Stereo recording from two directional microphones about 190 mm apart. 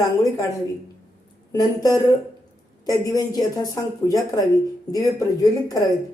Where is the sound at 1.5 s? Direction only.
20° left (ahead or behind).